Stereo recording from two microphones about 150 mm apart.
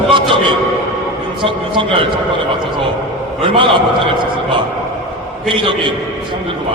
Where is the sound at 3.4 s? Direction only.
35° right (ahead or behind).